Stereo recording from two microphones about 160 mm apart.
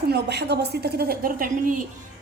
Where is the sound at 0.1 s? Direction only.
90° right.